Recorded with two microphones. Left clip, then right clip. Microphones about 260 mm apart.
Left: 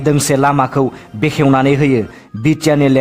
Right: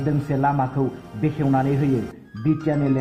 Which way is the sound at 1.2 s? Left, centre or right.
Left.